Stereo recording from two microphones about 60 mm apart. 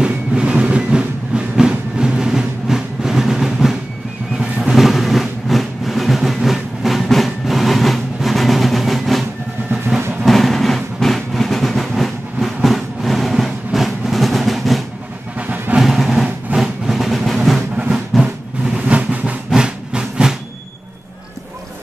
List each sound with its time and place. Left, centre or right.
0.0 s music: centre
4.4 s vehicle: centre
10.2 s train: centre
15.3 s music: right
15.8 s a sound: centre
18.2 s drum: right
19.5 s train: centre